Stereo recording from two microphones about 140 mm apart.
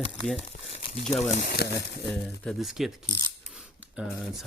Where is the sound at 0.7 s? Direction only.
50° left (ahead or behind).